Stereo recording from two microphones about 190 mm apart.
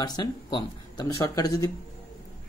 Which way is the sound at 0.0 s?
20° left (ahead or behind).